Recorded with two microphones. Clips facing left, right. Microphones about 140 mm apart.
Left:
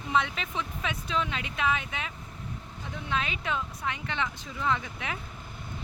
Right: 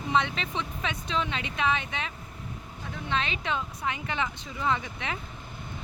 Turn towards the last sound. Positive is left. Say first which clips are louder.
# right 1 dB
turn(degrees=0)  # may be behind; listen again after turning